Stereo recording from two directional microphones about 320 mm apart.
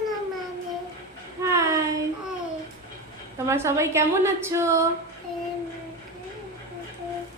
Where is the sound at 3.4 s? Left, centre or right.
Centre.